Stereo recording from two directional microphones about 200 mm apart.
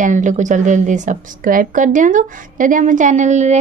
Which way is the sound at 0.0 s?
40° right (ahead or behind).